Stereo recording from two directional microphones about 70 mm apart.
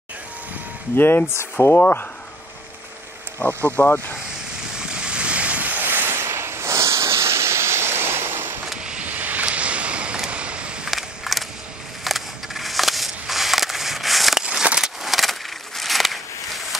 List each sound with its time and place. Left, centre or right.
0.9 s speech: left
1.8 s speech: left
3.3 s speech: left
4.7 s ocean: centre; by 8.5 s right
8.8 s a sound: centre
10.9 s a sound: centre
14.4 s vehicle: centre